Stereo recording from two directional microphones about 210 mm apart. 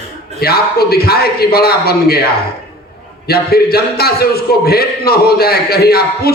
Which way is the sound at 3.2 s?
45° left (ahead or behind).